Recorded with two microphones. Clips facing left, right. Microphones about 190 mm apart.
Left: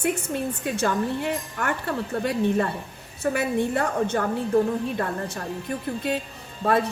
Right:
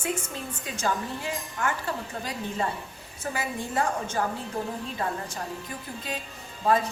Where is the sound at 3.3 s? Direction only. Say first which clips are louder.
Left 4 dB; 65° left (ahead or behind).